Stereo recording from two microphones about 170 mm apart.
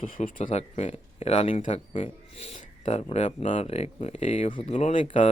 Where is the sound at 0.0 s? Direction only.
55° left (ahead or behind).